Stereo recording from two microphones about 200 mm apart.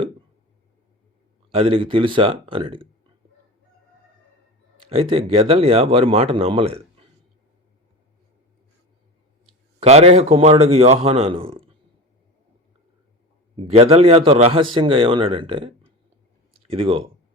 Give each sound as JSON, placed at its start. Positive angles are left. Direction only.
{"t": 1.5, "sound": "speech", "side_deg": -30}
{"t": 4.9, "sound": "speech", "side_deg": -30}
{"t": 9.8, "sound": "a man's voice", "side_deg": -30}
{"t": 13.6, "sound": "a man's voice", "side_deg": -30}